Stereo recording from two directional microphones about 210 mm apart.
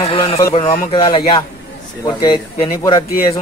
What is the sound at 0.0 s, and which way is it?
Speech, 25° left (ahead or behind).